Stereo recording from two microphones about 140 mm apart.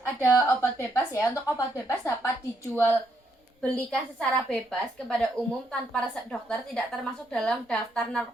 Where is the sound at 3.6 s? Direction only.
5° left (ahead or behind).